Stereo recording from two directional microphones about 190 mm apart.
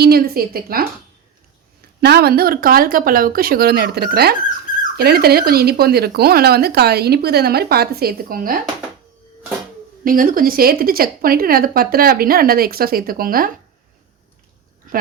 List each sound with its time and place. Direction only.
0.0 s speech: 50° right (ahead or behind)
2.0 s speech: 55° right (ahead or behind)
10.0 s speech: 45° right (ahead or behind)